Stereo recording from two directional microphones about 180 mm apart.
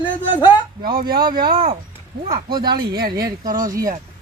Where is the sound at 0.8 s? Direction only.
55° right (ahead or behind).